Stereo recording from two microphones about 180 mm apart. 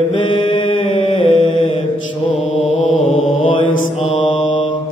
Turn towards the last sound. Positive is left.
turn(degrees=30)  # may be behind; listen again after turning